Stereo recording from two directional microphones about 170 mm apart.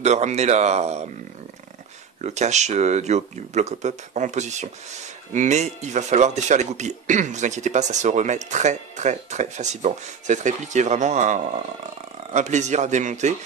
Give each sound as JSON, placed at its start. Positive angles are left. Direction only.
{"t": 0.0, "sound": "speech", "side_deg": -40}
{"t": 2.2, "sound": "speech", "side_deg": -40}